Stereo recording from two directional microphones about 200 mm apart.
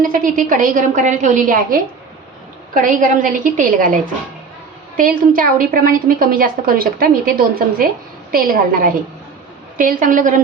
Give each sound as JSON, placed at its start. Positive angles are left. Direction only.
{"t": 0.0, "sound": "a woman's voice", "side_deg": -45}
{"t": 4.9, "sound": "a woman's voice", "side_deg": -45}